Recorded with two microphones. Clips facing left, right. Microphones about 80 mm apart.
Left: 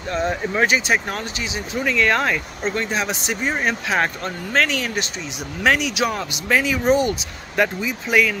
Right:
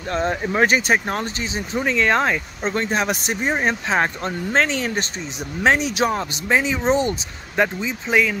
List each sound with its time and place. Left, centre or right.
0.1 s speech: right
0.5 s speech: right
1.7 s speech: right